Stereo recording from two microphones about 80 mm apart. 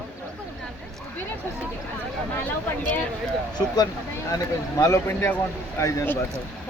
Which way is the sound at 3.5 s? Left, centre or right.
Left.